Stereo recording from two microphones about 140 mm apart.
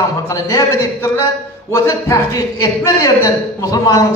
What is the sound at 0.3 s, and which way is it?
A man's voice, 25° left (ahead or behind).